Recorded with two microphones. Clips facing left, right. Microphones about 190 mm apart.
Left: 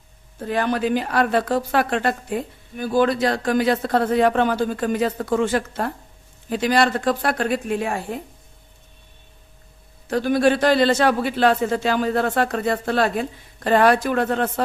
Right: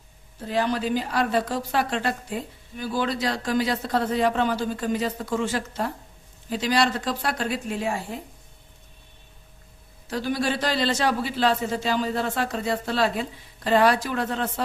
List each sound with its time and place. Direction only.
0.4 s a woman's voice: 55° left (ahead or behind)
10.1 s a woman's voice: 55° left (ahead or behind)